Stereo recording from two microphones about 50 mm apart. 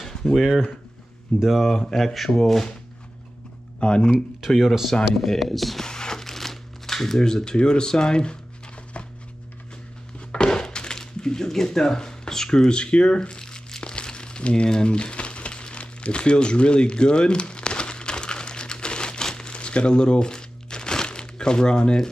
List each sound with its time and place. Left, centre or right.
0.0 s a sound: centre
1.4 s speech: centre
3.8 s speech: centre
4.5 s speech: centre
5.9 s crumpling: centre
10.3 s a sound: centre